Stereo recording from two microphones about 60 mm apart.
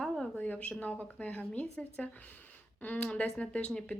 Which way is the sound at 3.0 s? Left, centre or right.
Centre.